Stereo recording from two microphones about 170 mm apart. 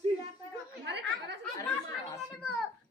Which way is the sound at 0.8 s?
90° right.